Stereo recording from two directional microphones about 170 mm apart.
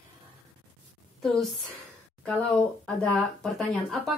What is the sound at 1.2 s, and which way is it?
A child's voice, centre (ahead or behind).